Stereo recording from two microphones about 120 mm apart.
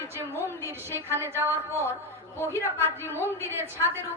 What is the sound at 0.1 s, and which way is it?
A woman's voice, 20° right (ahead or behind).